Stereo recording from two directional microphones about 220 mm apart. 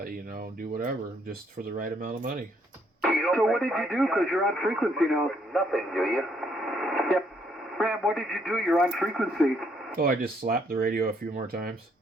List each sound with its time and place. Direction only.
0.0 s speech: 40° right (ahead or behind)
3.0 s speech: centre (ahead or behind)
6.7 s radio: centre (ahead or behind)
7.8 s speech: centre (ahead or behind)
9.9 s speech: 40° right (ahead or behind)